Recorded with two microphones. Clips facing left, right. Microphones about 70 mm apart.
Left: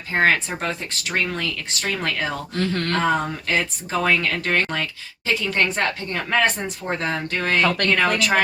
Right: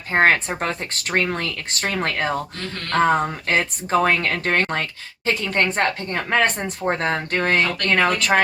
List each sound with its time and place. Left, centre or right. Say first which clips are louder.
0.1 s speech: right 2 dB; right